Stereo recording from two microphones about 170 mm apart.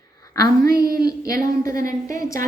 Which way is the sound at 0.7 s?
65° right (ahead or behind).